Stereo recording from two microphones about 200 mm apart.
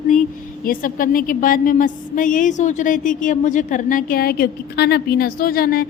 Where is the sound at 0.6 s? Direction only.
45° left (ahead or behind).